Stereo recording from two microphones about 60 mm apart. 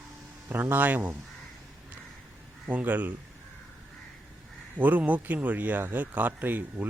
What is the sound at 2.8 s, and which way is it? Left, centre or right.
Speech, right.